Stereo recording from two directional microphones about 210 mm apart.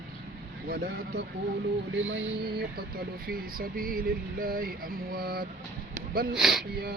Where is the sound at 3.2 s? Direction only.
45° right (ahead or behind).